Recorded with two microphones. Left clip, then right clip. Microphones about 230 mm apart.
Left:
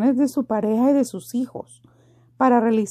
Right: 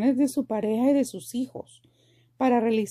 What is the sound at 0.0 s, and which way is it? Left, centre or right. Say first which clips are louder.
A woman's voice: left 4 dB; centre.